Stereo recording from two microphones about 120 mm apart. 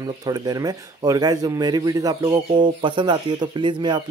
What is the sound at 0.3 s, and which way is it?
Speech, 30° right (ahead or behind).